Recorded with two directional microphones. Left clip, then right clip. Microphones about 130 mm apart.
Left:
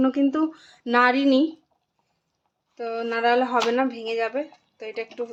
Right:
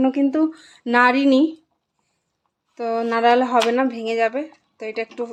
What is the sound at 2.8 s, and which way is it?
A woman's voice, 35° right (ahead or behind).